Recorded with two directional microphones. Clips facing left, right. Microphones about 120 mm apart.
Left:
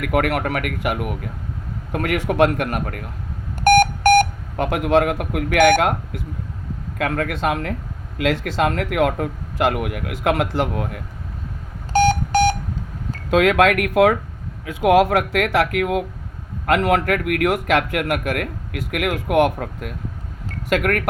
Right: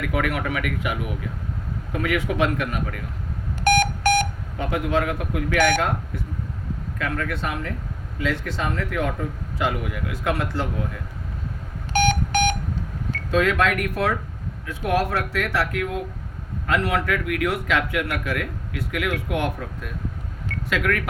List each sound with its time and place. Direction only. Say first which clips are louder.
0.0 s speech: left 5 dB; 60° left (ahead or behind)
3.6 s a sound: left 6 dB; 55° left (ahead or behind)
7.0 s a man's voice: left 6 dB; 70° left (ahead or behind)
8.2 s a man's voice: left 7 dB; 90° left; by 11.0 s 75° left (ahead or behind)
11.9 s alarm clock: left 5 dB; 40° left (ahead or behind)
13.3 s a man's voice: left 5 dB; 70° left (ahead or behind)
14.8 s a man's voice: left 8 dB; 85° left
16.6 s speech: left 5 dB; 60° left (ahead or behind)